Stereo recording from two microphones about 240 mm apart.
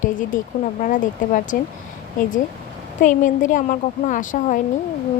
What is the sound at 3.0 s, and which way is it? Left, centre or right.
A woman's voice, left.